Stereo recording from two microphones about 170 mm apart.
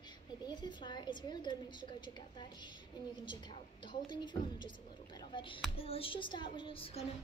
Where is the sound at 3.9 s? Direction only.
30° left (ahead or behind).